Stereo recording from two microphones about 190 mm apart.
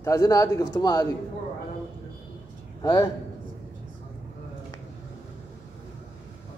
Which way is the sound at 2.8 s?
20° left (ahead or behind).